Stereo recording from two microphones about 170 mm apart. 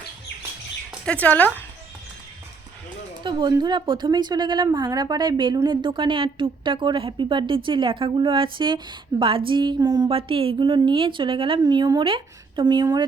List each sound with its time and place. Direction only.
1.0 s speech: 10° left (ahead or behind)
3.2 s a woman's voice: 30° right (ahead or behind)